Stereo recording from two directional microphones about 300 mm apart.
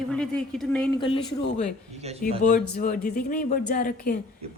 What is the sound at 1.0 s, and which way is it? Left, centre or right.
Speech, centre.